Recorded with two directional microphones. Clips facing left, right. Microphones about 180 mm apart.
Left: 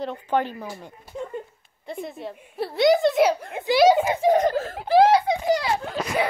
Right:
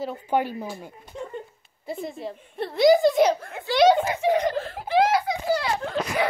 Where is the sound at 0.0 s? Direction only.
10° right (ahead or behind).